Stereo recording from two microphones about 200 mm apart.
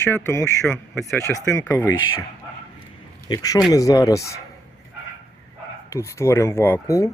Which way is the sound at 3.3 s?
20° left (ahead or behind).